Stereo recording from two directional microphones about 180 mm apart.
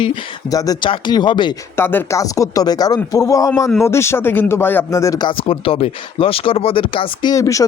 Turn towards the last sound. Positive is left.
turn(degrees=20)  # may be behind; listen again after turning